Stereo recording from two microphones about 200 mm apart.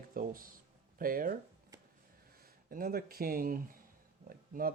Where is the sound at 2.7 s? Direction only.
50° right (ahead or behind).